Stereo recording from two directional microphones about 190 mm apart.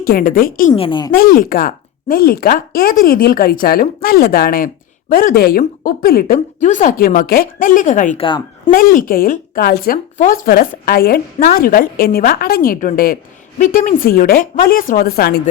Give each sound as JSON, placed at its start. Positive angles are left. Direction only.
{"t": 0.0, "sound": "speech", "side_deg": 50}
{"t": 0.7, "sound": "speech", "side_deg": 25}
{"t": 1.1, "sound": "speech", "side_deg": 45}
{"t": 8.2, "sound": "speech", "side_deg": 30}
{"t": 8.7, "sound": "speech", "side_deg": 50}